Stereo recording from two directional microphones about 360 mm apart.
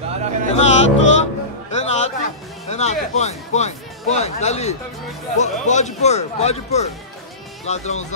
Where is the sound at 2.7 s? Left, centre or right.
Centre.